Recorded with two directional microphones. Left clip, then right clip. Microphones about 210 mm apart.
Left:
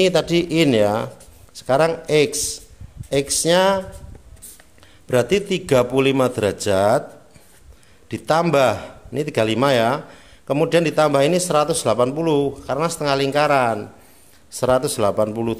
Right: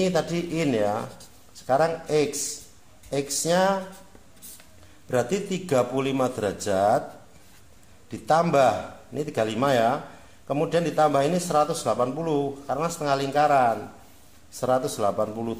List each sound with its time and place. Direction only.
0.0 s a man's voice: 45° left (ahead or behind)
5.0 s a man's voice: 45° left (ahead or behind)
8.1 s a man's voice: 45° left (ahead or behind)